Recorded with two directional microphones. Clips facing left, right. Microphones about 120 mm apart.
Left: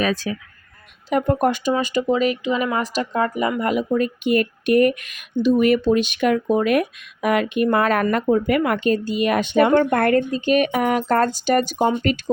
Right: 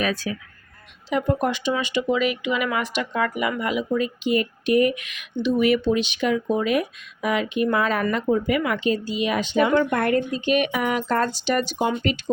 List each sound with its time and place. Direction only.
1.1 s speech: 50° left (ahead or behind)
3.6 s speech: 50° left (ahead or behind)
10.3 s speech: 40° left (ahead or behind)